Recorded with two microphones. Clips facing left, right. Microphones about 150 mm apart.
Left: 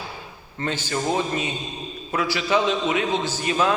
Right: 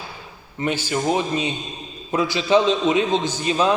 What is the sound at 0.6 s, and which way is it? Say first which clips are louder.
Speech: right 3 dB; 15° right (ahead or behind).